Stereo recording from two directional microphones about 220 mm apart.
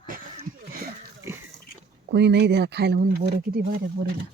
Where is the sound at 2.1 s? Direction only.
50° right (ahead or behind).